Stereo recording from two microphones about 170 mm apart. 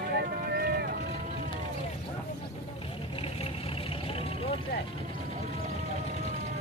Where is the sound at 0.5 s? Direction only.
65° right (ahead or behind).